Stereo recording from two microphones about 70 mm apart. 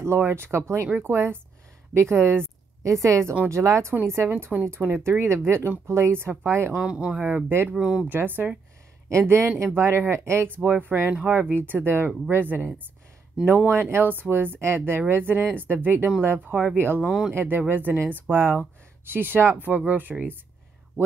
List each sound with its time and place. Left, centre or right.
0.2 s speech: right
2.8 s a woman's voice: right
6.7 s speech: centre
7.4 s speech: right
7.7 s speech: centre
8.1 s speech: right
9.1 s speech: right
17.0 s speech: centre
17.3 s speech: right